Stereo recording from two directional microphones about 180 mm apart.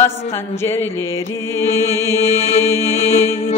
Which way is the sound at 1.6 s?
15° left (ahead or behind).